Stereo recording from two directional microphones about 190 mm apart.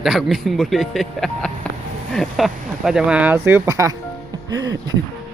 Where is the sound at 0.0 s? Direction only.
Centre (ahead or behind).